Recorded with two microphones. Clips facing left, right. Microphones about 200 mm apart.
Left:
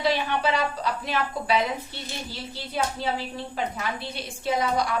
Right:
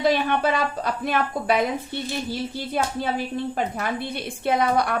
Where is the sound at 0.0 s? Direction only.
50° right (ahead or behind).